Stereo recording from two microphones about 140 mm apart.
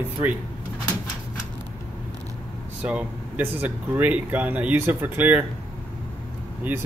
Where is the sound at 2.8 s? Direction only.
10° right (ahead or behind).